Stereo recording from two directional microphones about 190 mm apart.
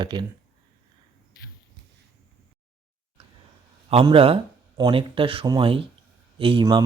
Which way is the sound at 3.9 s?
30° right (ahead or behind).